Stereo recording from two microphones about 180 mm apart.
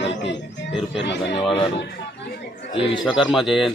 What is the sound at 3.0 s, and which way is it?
Speech, centre (ahead or behind).